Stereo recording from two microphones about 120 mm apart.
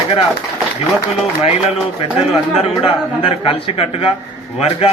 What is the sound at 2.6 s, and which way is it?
A man's voice, 50° left (ahead or behind).